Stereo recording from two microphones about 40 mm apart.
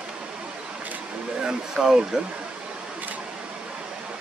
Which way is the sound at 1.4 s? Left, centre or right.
Centre.